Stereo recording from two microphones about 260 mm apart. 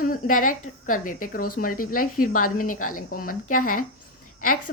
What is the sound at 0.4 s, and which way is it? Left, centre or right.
Speech, left.